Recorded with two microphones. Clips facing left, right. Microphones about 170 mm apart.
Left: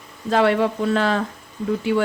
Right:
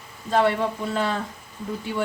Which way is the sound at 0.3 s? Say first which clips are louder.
Left 4 dB; 90° left.